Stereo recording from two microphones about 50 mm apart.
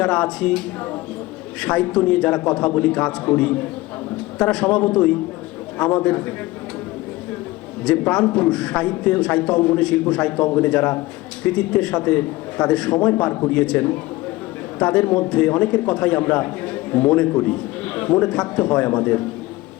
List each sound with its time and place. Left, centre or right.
0.0 s a man's voice: centre
1.6 s a man's voice: centre
7.9 s a man's voice: centre
8.2 s a man's voice: left
8.4 s a man's voice: centre
18.9 s a man's voice: left